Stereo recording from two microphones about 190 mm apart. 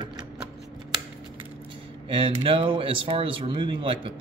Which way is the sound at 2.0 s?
25° right (ahead or behind).